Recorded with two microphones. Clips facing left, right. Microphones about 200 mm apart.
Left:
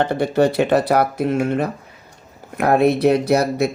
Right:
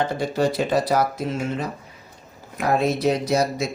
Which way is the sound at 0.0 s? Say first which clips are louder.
Left 5 dB; 60° left (ahead or behind).